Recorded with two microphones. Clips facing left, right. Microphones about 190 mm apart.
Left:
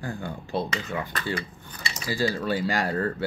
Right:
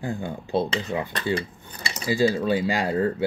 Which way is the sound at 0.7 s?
30° right (ahead or behind).